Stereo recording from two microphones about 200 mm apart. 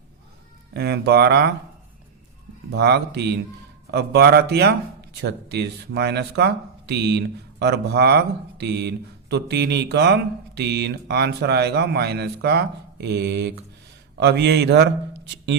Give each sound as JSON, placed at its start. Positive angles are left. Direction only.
{"t": 0.7, "sound": "speech", "side_deg": -55}
{"t": 2.7, "sound": "speech", "side_deg": -55}